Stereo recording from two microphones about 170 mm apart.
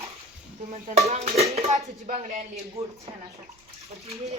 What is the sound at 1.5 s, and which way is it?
Speech, 45° right (ahead or behind).